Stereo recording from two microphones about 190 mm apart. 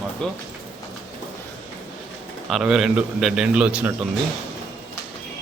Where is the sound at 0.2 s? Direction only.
5° left (ahead or behind).